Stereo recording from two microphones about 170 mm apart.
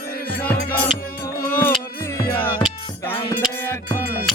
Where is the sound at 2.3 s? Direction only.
10° left (ahead or behind).